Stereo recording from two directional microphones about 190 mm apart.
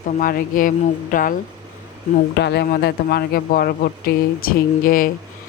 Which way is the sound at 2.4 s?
60° left (ahead or behind).